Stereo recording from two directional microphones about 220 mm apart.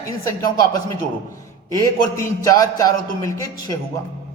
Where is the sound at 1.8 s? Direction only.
15° left (ahead or behind).